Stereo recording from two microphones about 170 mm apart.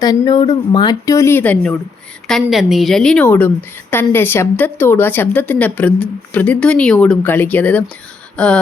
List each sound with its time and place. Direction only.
0.0 s speech: 20° left (ahead or behind)
2.2 s a woman's voice: centre (ahead or behind)